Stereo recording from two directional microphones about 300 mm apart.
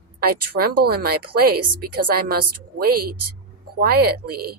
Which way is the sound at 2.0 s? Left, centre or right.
Right.